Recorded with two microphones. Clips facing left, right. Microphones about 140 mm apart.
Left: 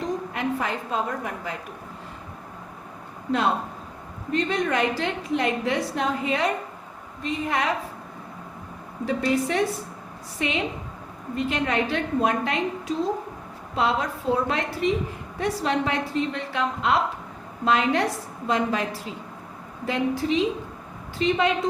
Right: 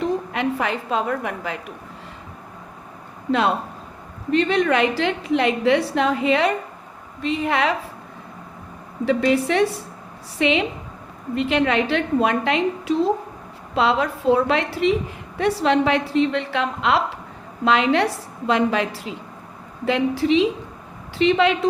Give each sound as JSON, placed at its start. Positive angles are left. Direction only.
{"t": 0.3, "sound": "a woman's voice", "side_deg": -85}
{"t": 4.3, "sound": "a woman's voice", "side_deg": -75}
{"t": 9.0, "sound": "a woman's voice", "side_deg": -85}